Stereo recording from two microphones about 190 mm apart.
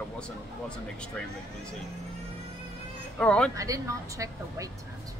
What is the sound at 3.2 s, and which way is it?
Speech, 5° left (ahead or behind).